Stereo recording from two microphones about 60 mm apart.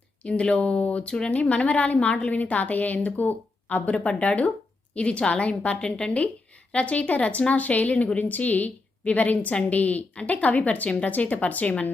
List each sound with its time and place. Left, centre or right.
0.2 s a woman's voice: centre